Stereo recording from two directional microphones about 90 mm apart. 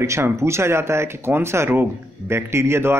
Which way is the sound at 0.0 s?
30° right (ahead or behind).